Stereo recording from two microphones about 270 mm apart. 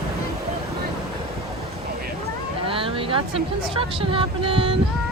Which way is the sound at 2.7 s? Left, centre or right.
Centre.